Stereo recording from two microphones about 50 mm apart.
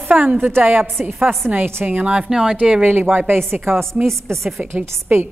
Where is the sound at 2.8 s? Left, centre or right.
Right.